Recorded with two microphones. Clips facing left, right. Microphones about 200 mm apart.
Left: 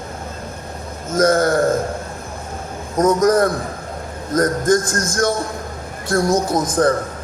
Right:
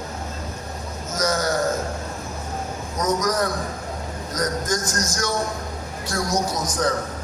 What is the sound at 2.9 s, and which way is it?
A man's voice, 55° left (ahead or behind).